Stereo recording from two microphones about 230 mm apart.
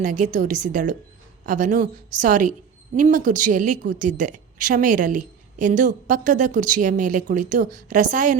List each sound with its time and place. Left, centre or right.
0.0 s a woman's voice: right